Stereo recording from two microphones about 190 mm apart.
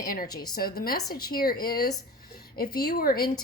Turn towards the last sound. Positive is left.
turn(degrees=50)  # may be behind; listen again after turning